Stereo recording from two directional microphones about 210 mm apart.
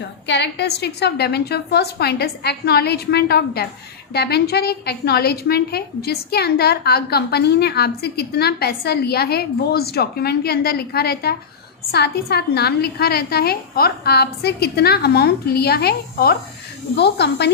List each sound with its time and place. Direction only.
0.3 s a woman's voice: 55° left (ahead or behind)